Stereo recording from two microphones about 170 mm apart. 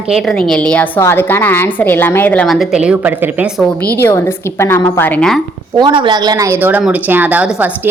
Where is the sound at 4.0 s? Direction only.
15° left (ahead or behind).